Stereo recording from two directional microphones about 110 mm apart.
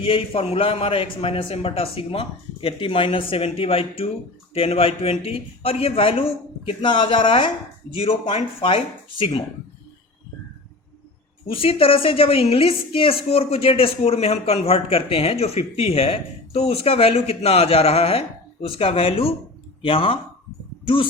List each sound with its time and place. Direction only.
0.0 s a woman's voice: 55° left (ahead or behind)
11.4 s a woman's voice: 55° left (ahead or behind)